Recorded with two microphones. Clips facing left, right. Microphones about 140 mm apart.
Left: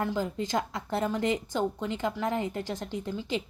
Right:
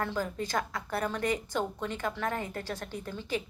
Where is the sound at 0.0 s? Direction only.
15° left (ahead or behind).